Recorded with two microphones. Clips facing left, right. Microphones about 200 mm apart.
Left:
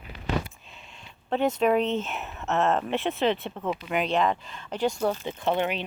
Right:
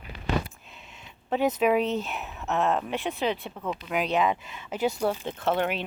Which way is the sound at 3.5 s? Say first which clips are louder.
Left 3 dB; 20° left (ahead or behind).